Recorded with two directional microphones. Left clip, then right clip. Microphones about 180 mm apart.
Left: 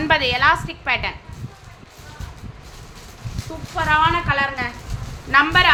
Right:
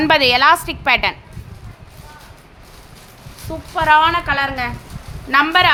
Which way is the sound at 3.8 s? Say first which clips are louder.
Right 4 dB; 55° right (ahead or behind).